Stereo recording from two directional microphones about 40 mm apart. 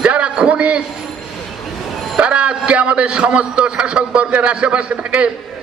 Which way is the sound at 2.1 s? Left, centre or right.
Right.